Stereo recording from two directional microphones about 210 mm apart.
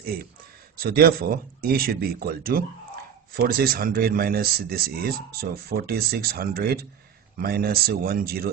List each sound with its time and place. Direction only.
0.7 s speech: 45° right (ahead or behind)